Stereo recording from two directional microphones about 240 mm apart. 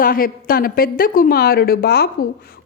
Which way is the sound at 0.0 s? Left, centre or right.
Left.